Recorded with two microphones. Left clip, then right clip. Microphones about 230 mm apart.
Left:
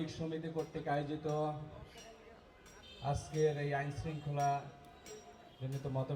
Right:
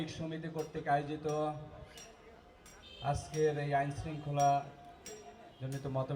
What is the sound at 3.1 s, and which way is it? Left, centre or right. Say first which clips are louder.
A man's voice: right 2 dB; right.